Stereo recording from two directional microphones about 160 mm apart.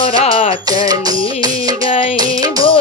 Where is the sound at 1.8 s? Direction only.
35° left (ahead or behind).